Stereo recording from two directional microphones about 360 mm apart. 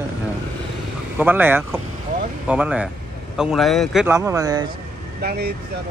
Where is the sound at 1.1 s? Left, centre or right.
Centre.